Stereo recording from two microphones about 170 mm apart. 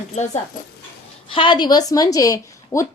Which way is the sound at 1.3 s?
30° left (ahead or behind).